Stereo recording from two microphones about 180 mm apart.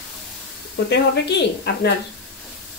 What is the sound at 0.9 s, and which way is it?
Speech, 70° left (ahead or behind).